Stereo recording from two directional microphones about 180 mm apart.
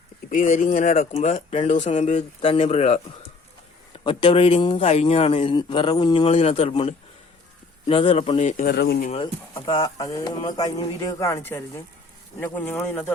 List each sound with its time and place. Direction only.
0.3 s a man's voice: 45° left (ahead or behind); by 8.4 s 30° left (ahead or behind)
8.4 s speech: 45° left (ahead or behind)
8.7 s speech: 70° left (ahead or behind)
9.1 s speech: 30° left (ahead or behind); by 13.1 s 10° left (ahead or behind)